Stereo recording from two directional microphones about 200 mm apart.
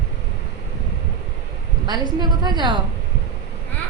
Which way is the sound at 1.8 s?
20° right (ahead or behind).